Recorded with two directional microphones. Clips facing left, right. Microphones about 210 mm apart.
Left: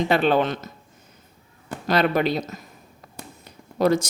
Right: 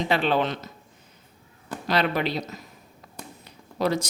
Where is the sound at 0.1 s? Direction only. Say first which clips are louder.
Left 3 dB; 50° left (ahead or behind).